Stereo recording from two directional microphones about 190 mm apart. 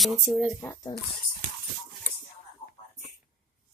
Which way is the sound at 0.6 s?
20° left (ahead or behind).